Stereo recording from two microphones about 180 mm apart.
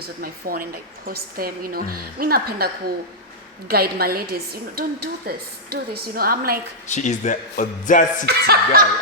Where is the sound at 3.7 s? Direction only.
55° right (ahead or behind).